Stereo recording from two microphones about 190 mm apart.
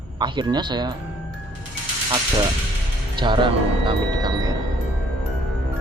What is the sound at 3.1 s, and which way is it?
Speech, 25° right (ahead or behind).